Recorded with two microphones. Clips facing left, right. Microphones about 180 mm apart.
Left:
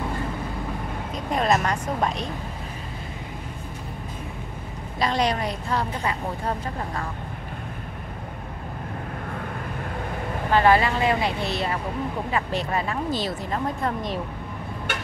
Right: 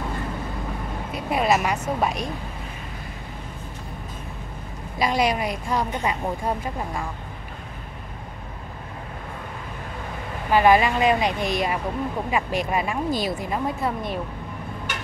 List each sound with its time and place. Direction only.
1.1 s speech: 10° right (ahead or behind)
4.9 s speech: 10° right (ahead or behind)
10.5 s speech: 15° right (ahead or behind)